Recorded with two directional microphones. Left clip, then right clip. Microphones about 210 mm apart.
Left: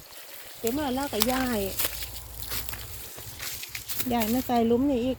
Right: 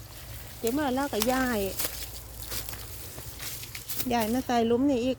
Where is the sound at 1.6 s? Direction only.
5° right (ahead or behind).